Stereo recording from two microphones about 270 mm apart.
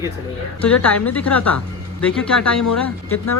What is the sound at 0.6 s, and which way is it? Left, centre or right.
A woman's voice, centre.